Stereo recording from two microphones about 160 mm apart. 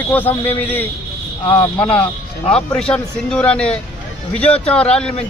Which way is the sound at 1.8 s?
10° left (ahead or behind).